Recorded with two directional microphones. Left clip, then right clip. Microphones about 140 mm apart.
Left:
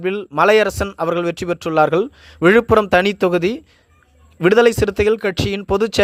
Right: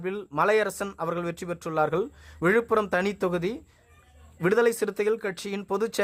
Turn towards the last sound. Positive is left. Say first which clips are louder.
# left 10 dB
turn(degrees=35)  # may be behind; listen again after turning